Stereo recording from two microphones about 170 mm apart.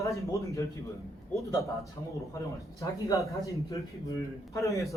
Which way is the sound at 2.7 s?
20° left (ahead or behind).